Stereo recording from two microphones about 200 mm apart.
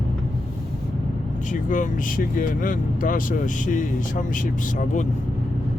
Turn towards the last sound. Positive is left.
turn(degrees=40)  # may be behind; listen again after turning